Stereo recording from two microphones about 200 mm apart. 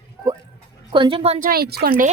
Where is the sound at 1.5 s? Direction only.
50° right (ahead or behind).